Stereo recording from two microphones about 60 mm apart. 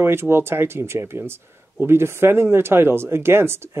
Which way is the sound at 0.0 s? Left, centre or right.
Right.